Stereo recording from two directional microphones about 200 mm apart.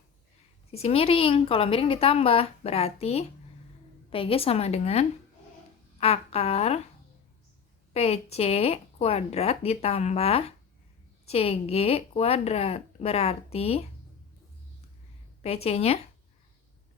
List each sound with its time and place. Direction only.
0.7 s a woman's voice: 30° left (ahead or behind)
7.9 s speech: 30° left (ahead or behind)
15.4 s speech: 30° left (ahead or behind)